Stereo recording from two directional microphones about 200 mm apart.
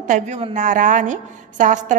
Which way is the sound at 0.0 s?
40° right (ahead or behind).